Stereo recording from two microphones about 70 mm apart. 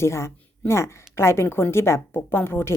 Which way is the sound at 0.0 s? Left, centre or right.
Left.